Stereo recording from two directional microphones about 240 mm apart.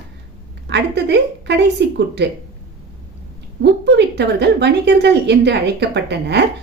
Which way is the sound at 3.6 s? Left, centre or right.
Right.